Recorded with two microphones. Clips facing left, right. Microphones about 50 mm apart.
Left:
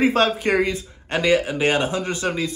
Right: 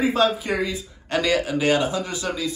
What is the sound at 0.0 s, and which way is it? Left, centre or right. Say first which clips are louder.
Speech: left 2 dB; left.